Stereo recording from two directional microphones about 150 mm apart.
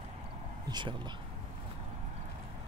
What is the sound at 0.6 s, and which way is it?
Speech, 30° right (ahead or behind).